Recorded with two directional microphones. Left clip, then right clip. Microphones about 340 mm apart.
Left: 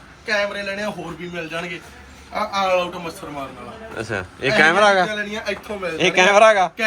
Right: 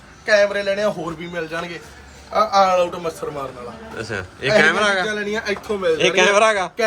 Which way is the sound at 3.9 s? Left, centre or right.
Centre.